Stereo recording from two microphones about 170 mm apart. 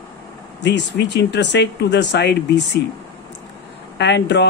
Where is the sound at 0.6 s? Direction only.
85° left.